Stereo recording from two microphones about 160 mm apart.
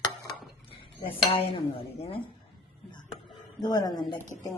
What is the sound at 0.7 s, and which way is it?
Speech, 35° left (ahead or behind).